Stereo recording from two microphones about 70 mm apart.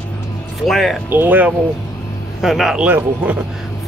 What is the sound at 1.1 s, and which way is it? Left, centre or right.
Speech, right.